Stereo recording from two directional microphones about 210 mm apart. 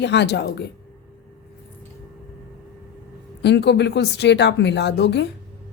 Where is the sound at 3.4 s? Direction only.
55° left (ahead or behind).